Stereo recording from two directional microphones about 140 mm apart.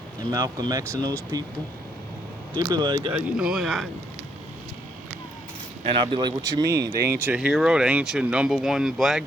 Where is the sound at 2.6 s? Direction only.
30° right (ahead or behind).